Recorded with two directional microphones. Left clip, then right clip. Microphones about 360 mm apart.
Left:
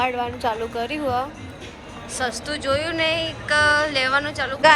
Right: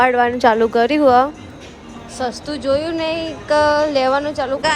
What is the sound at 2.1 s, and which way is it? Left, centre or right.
A woman's voice, centre.